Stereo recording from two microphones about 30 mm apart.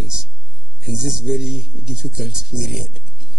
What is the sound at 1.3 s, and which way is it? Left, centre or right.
A man's voice, right.